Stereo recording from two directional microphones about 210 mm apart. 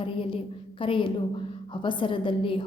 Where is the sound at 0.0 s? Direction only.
25° left (ahead or behind).